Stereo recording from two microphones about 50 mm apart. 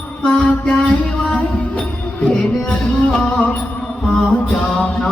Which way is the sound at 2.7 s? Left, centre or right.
Centre.